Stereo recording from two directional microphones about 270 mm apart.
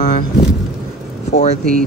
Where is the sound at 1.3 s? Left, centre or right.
Left.